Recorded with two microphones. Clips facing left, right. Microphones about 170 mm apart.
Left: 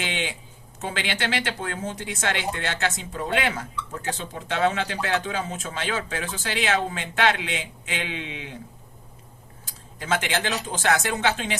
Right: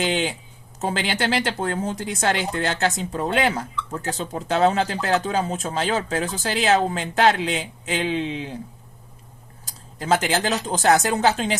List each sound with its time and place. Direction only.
0.0 s speech: 40° right (ahead or behind)
10.0 s speech: 40° right (ahead or behind)